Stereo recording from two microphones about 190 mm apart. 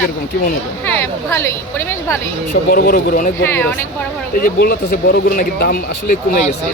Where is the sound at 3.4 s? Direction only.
10° left (ahead or behind).